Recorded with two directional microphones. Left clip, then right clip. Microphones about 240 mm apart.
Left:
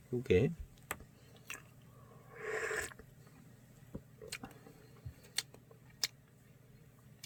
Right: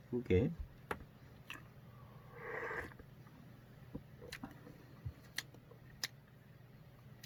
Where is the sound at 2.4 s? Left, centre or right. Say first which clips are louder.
Left 5 dB; left.